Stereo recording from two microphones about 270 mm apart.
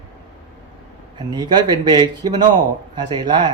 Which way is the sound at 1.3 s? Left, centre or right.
Centre.